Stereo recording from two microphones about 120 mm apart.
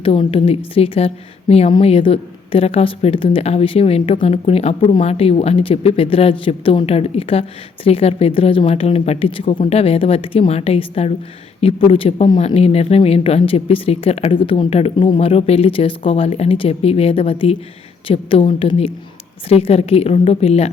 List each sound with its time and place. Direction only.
0.0 s a woman's voice: 50° left (ahead or behind)